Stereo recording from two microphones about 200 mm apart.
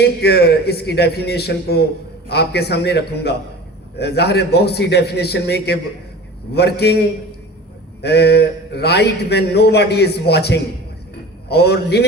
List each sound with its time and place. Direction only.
0.0 s a man's voice: 55° left (ahead or behind)
8.0 s a man's voice: 55° left (ahead or behind)